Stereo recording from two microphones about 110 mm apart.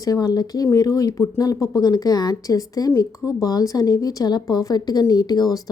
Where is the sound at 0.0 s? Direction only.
30° left (ahead or behind).